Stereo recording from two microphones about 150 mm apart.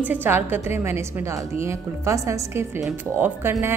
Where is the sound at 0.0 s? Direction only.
15° right (ahead or behind).